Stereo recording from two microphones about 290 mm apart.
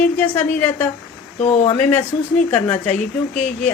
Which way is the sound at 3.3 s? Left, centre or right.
Left.